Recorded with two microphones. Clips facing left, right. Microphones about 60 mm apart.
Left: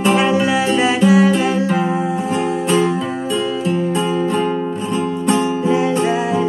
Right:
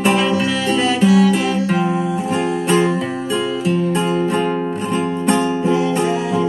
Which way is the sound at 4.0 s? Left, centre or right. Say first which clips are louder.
Even; centre.